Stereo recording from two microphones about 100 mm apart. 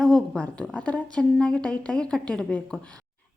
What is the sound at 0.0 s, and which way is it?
A woman's voice, 5° left (ahead or behind).